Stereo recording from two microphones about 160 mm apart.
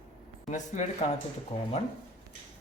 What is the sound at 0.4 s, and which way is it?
Speech, 45° left (ahead or behind).